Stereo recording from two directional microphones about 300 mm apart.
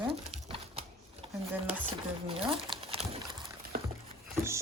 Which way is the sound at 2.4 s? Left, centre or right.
Centre.